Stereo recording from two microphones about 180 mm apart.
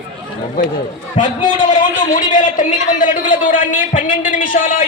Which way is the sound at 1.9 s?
45° left (ahead or behind).